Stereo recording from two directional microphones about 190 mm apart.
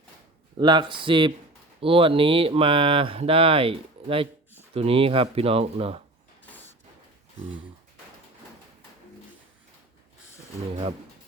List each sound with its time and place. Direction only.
0.6 s speech: 25° right (ahead or behind)